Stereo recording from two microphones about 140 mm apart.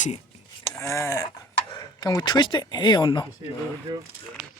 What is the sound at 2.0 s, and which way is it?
Speech, 25° left (ahead or behind).